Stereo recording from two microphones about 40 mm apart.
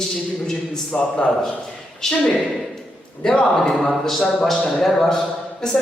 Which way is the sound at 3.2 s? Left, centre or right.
Centre.